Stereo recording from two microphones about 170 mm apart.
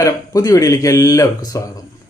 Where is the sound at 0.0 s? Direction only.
20° left (ahead or behind).